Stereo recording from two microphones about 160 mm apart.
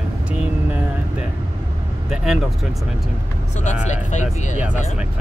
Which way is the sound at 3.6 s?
50° left (ahead or behind).